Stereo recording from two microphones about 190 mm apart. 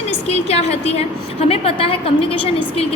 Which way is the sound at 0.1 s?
35° left (ahead or behind).